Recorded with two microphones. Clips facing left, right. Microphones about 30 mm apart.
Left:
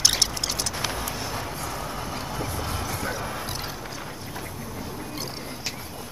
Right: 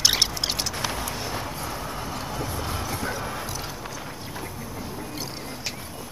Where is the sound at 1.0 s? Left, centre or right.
Centre.